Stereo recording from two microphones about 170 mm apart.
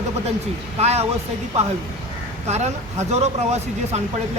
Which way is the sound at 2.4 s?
40° right (ahead or behind).